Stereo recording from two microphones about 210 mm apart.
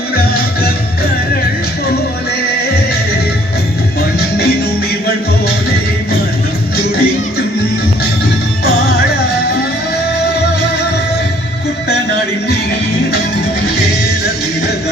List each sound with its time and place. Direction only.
0.2 s music: 45° left (ahead or behind)
2.5 s music: 50° left (ahead or behind)
4.2 s music: 45° left (ahead or behind)
6.7 s music: 45° left (ahead or behind)